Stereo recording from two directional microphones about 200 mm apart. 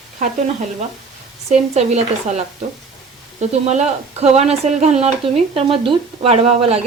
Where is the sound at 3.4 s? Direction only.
35° right (ahead or behind).